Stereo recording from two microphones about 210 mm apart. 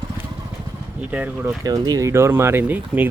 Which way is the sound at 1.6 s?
20° right (ahead or behind).